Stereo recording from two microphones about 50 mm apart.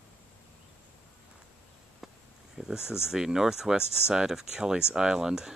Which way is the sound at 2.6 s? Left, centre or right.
Centre.